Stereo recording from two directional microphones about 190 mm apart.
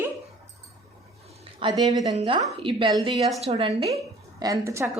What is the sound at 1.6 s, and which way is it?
A woman's voice, 25° right (ahead or behind).